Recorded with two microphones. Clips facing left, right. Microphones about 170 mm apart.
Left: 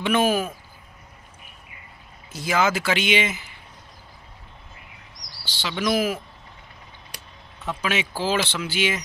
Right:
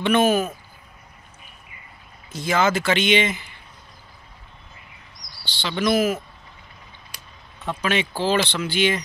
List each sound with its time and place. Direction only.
0.0 s speech: 5° left (ahead or behind)
2.3 s speech: 5° left (ahead or behind)
5.4 s speech: 5° left (ahead or behind)
7.6 s speech: 5° left (ahead or behind)